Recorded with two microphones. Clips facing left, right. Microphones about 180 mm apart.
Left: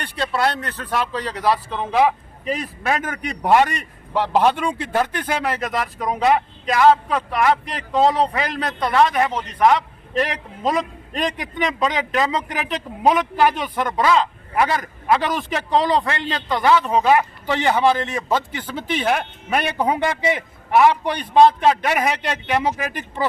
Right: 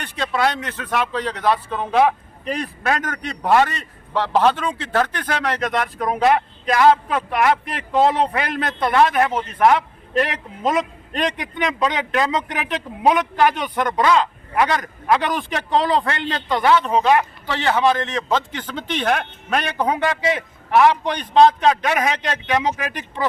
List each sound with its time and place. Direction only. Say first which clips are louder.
0.2 s a man's voice: even; 5° left (ahead or behind)